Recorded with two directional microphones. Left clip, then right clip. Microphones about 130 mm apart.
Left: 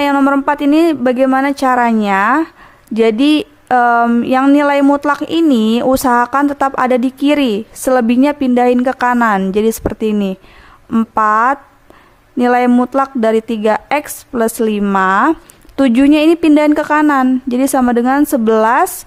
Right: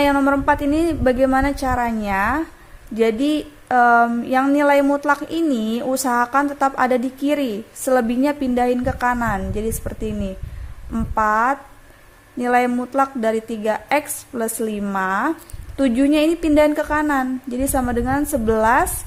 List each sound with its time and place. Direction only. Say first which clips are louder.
0.0 s speech: left 4 dB; 50° left (ahead or behind)